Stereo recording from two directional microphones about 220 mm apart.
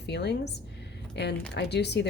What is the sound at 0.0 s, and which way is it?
Speech, 50° left (ahead or behind).